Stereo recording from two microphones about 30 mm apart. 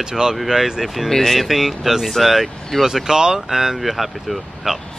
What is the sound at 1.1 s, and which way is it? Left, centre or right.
Speech, centre.